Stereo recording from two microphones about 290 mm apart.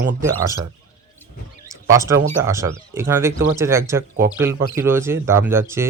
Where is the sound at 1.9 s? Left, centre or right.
Centre.